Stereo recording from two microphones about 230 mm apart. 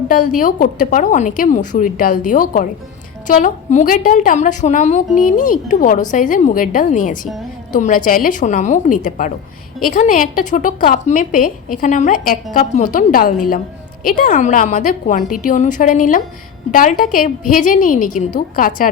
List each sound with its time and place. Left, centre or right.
0.1 s a woman's voice: left